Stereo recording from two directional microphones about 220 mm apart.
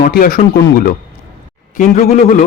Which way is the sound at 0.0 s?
40° left (ahead or behind).